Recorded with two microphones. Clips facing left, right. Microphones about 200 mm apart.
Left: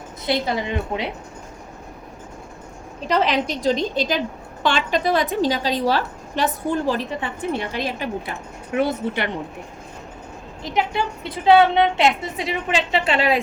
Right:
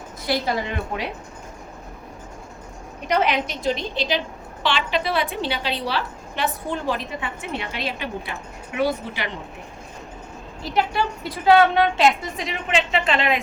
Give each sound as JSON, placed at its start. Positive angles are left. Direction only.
{"t": 0.3, "sound": "a woman's voice", "side_deg": 20}
{"t": 3.1, "sound": "a woman's voice", "side_deg": 35}
{"t": 3.7, "sound": "a woman's voice", "side_deg": 45}
{"t": 8.8, "sound": "a woman's voice", "side_deg": 55}
{"t": 10.6, "sound": "a woman's voice", "side_deg": 20}